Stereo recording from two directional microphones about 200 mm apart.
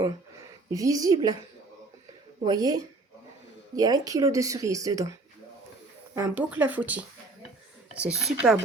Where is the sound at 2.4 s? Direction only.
20° right (ahead or behind); by 8.6 s centre (ahead or behind).